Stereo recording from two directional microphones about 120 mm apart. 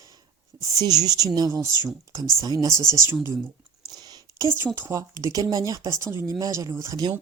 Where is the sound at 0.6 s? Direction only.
30° right (ahead or behind).